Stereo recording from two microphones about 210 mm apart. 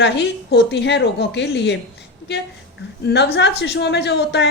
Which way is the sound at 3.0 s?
50° left (ahead or behind).